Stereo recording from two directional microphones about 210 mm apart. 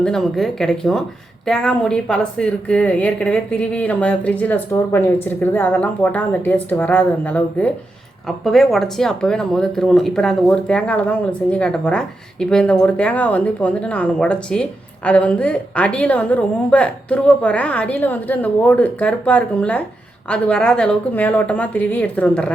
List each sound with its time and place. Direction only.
0.0 s a woman's voice: centre (ahead or behind)